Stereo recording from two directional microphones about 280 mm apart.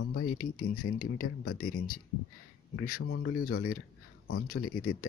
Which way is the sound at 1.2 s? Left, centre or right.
Left.